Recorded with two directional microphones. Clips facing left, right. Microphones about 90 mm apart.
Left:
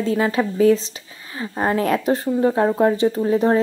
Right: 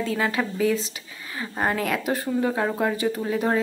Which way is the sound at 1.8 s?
30° left (ahead or behind).